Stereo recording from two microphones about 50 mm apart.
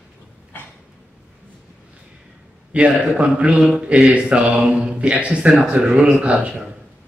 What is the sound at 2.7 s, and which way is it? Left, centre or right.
Speech, right.